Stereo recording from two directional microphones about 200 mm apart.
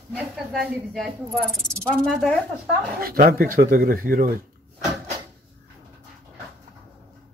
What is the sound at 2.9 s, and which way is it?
Speech, 45° right (ahead or behind).